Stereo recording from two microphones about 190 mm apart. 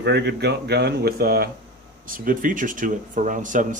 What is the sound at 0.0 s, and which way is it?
Speech, 60° right (ahead or behind).